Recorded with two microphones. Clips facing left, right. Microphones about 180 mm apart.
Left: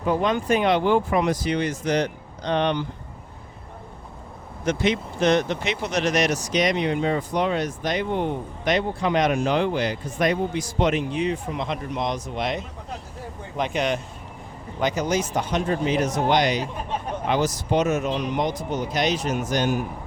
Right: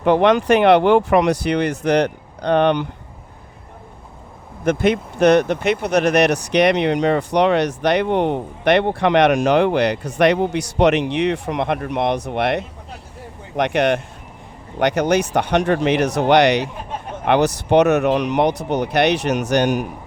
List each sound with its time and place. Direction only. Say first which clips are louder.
0.0 s speech: right 8 dB; 75° right (ahead or behind); by 2.8 s 55° right (ahead or behind)
4.6 s speech: right 5 dB; 55° right (ahead or behind); by 19.9 s 80° right